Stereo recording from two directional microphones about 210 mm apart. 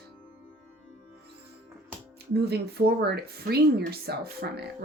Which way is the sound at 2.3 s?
50° right (ahead or behind).